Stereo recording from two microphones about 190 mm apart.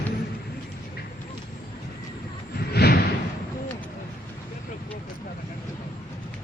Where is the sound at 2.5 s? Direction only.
55° left (ahead or behind).